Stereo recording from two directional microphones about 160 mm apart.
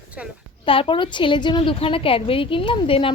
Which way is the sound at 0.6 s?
35° left (ahead or behind).